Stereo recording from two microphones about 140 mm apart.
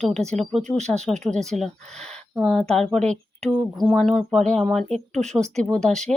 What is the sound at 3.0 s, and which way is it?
Speech, 55° right (ahead or behind).